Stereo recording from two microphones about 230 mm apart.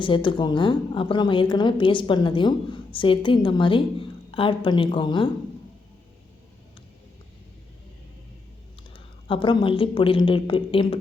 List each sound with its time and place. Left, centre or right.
0.0 s a woman's voice: left
8.9 s a woman's voice: left